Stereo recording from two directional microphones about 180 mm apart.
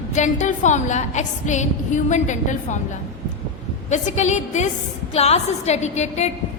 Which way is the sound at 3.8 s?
40° left (ahead or behind).